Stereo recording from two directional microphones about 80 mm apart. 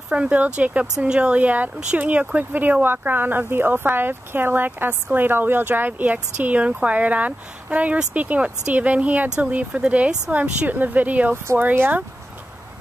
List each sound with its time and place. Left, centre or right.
0.1 s speech: centre